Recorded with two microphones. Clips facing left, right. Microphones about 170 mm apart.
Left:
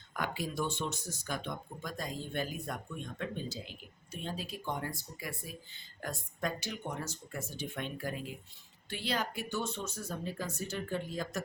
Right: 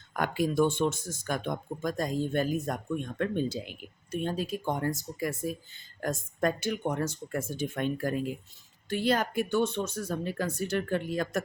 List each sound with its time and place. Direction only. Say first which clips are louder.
0.1 s speech: right 8 dB; 50° right (ahead or behind); by 11.4 s 65° right (ahead or behind)